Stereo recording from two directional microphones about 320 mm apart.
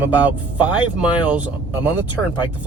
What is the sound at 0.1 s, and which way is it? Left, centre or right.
Speech, centre.